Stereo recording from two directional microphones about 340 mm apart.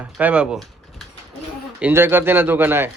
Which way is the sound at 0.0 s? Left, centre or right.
Centre.